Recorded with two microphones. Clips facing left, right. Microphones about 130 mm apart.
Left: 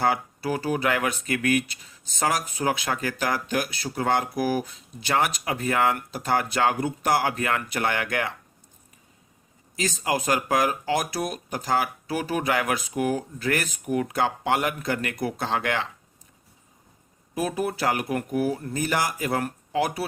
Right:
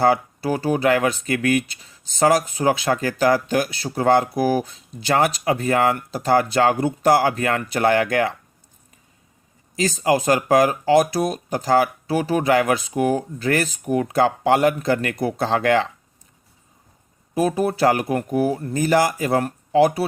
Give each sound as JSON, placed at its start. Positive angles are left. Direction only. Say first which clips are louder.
{"t": 0.0, "sound": "speech", "louder": "right 6 dB", "side_deg": -30}
{"t": 9.7, "sound": "speech", "louder": "right 7 dB", "side_deg": -35}
{"t": 17.3, "sound": "speech", "louder": "right 7 dB", "side_deg": -30}